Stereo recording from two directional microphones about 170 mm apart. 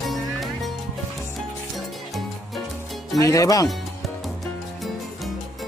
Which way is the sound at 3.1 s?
20° left (ahead or behind).